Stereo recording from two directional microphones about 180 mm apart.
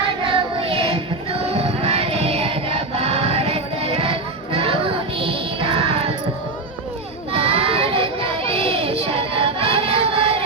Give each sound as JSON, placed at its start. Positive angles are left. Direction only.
{"t": 0.3, "sound": "music", "side_deg": -30}
{"t": 7.3, "sound": "child singing", "side_deg": -30}